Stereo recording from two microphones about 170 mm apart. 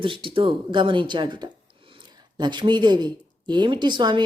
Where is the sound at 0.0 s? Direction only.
30° right (ahead or behind).